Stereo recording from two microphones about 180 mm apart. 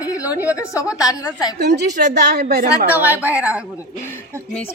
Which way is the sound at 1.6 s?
70° right (ahead or behind).